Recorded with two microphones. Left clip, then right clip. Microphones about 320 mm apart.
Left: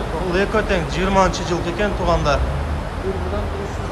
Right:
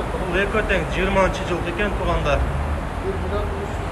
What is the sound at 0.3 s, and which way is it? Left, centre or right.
Speech, centre.